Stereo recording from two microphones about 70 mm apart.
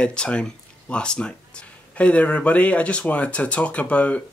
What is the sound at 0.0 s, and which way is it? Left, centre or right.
Speech, centre.